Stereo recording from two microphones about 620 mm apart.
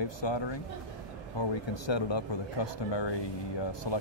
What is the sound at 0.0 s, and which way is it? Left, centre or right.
Speech, left.